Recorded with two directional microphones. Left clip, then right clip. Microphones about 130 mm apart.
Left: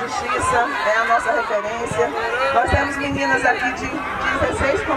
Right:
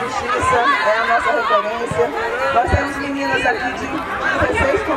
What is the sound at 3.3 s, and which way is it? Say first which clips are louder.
Speech: even; 30° left (ahead or behind).